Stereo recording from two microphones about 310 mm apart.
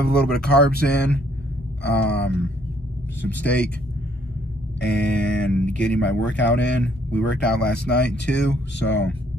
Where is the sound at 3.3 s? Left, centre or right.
Centre.